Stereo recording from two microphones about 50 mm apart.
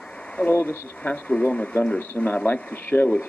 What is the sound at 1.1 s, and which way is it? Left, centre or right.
Speech, left.